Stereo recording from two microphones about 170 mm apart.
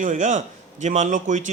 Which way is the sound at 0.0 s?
45° right (ahead or behind).